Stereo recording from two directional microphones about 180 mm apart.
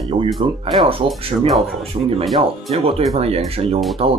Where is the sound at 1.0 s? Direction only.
Centre (ahead or behind).